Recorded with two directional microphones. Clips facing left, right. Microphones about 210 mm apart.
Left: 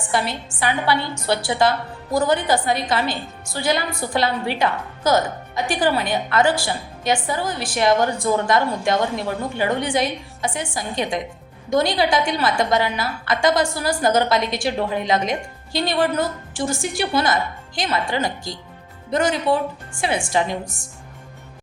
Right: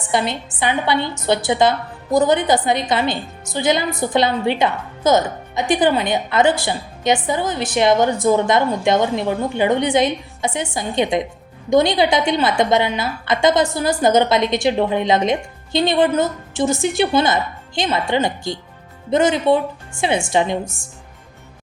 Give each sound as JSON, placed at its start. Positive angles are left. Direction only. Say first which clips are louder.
{"t": 0.1, "sound": "a woman's voice", "louder": "right 3 dB", "side_deg": -20}